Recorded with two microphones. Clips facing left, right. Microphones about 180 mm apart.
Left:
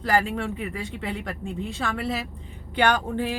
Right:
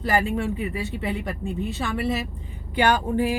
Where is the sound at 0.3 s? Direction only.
5° right (ahead or behind).